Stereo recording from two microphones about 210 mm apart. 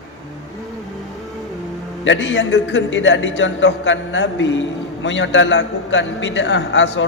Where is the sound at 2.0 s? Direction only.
60° left (ahead or behind).